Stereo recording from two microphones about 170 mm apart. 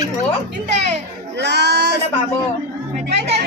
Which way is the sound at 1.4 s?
85° right.